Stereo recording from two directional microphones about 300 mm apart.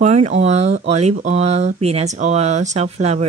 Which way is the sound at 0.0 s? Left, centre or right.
Right.